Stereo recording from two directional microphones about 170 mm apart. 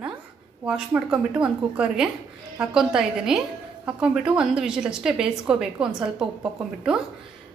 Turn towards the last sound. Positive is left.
turn(degrees=-5)  # may be behind; listen again after turning